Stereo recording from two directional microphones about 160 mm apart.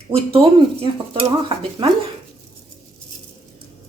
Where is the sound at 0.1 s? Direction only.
35° right (ahead or behind).